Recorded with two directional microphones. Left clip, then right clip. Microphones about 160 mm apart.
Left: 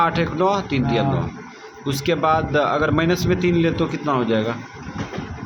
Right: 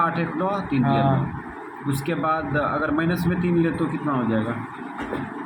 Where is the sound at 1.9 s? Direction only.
60° left (ahead or behind).